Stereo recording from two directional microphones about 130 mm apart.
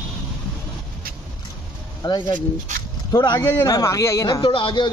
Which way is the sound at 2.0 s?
35° left (ahead or behind).